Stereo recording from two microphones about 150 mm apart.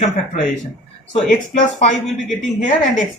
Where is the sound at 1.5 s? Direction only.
55° left (ahead or behind).